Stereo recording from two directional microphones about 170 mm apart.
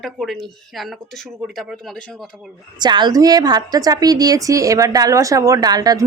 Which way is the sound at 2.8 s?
25° right (ahead or behind).